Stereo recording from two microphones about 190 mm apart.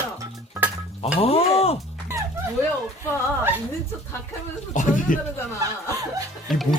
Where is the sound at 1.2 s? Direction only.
30° left (ahead or behind).